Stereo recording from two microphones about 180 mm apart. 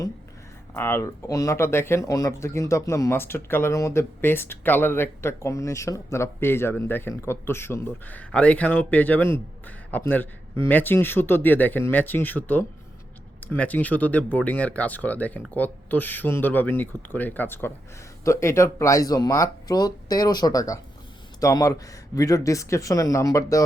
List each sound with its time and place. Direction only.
0.7 s speech: 15° left (ahead or behind)